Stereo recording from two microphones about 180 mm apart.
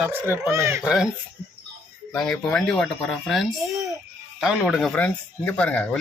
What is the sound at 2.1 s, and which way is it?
Speech, 5° left (ahead or behind).